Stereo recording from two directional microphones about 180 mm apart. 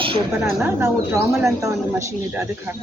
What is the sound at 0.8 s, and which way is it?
Speech, 15° right (ahead or behind).